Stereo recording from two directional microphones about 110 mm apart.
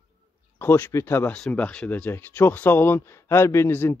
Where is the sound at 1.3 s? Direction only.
10° left (ahead or behind).